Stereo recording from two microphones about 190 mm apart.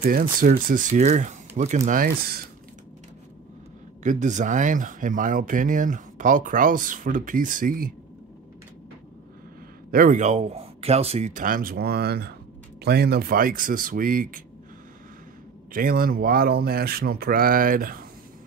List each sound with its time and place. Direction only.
0.0 s speech: 50° right (ahead or behind)
1.9 s speech: 50° right (ahead or behind)
4.0 s speech: 40° right (ahead or behind)
9.8 s speech: 45° right (ahead or behind)
15.7 s speech: 50° right (ahead or behind)